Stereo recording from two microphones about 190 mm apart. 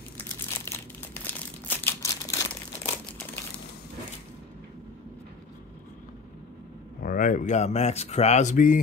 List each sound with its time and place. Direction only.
0.7 s crumpling: 10° left (ahead or behind)
7.0 s speech: 50° left (ahead or behind)